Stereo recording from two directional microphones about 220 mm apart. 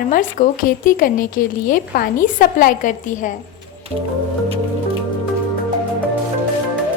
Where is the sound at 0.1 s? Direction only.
40° left (ahead or behind).